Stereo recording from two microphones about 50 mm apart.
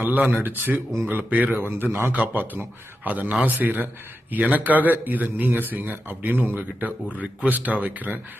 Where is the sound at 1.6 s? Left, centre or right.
Right.